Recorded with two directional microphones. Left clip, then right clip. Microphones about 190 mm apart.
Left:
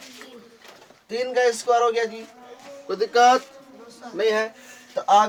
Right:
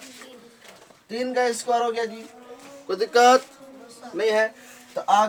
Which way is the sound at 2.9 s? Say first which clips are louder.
Even; 30° right (ahead or behind).